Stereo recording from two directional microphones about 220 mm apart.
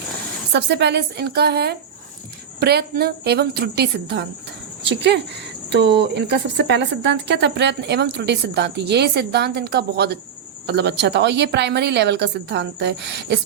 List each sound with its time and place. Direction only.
0.5 s speech: 50° right (ahead or behind)